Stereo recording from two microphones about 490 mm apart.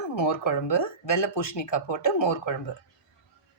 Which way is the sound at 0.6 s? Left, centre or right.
Left.